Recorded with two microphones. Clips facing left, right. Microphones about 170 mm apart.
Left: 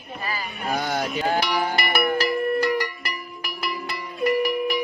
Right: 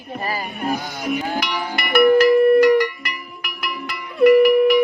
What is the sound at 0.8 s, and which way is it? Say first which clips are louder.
Speech: left 6 dB; 65° left (ahead or behind).